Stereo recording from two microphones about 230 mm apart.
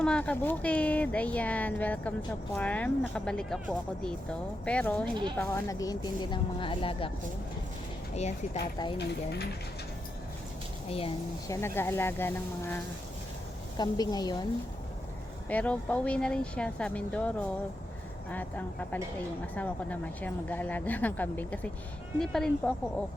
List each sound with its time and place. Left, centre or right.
0.0 s speech: centre; by 7.1 s left
8.1 s speech: left
9.0 s speech: left
10.9 s a woman's voice: left
11.5 s speech: centre
15.4 s speech: centre